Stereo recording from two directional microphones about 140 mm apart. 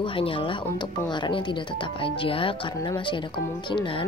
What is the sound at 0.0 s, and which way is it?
Speech, 40° left (ahead or behind).